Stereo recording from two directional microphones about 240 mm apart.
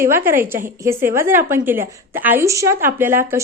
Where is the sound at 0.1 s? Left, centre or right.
Centre.